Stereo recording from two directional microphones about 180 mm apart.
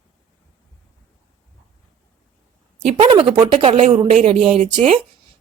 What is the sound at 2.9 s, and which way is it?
Speech, 35° right (ahead or behind).